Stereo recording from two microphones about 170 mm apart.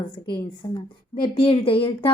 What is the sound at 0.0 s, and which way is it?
A woman's voice, 25° left (ahead or behind).